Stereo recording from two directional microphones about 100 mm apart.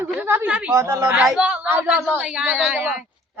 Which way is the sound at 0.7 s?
30° right (ahead or behind).